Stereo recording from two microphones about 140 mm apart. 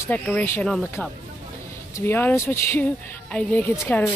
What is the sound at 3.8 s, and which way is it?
Speech, 20° left (ahead or behind).